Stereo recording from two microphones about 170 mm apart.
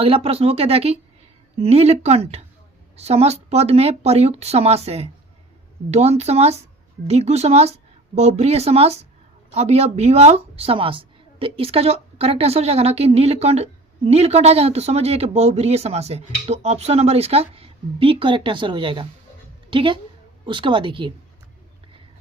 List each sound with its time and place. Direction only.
0.0 s a woman's voice: 35° right (ahead or behind)